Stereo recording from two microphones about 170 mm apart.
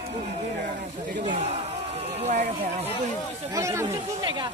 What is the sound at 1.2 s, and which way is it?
Battle cry, 45° right (ahead or behind).